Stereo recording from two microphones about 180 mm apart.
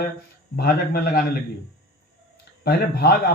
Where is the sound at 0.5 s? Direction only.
60° left (ahead or behind).